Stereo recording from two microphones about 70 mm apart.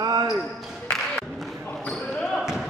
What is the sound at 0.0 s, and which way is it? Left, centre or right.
Basketball bounce, right.